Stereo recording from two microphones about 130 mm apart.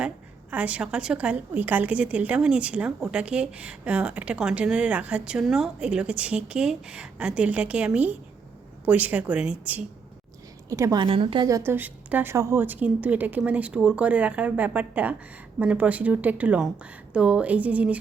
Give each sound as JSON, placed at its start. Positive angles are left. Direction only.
{"t": 0.5, "sound": "a woman's voice", "side_deg": -10}
{"t": 10.7, "sound": "a woman's voice", "side_deg": -25}
{"t": 11.0, "sound": "a woman's voice", "side_deg": -45}
{"t": 11.4, "sound": "a woman's voice", "side_deg": -20}